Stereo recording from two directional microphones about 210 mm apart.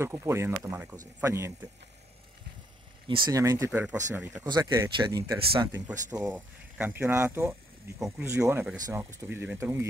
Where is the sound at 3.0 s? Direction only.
20° right (ahead or behind).